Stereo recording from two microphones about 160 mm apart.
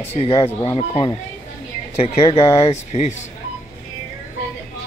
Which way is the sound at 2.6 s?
40° left (ahead or behind).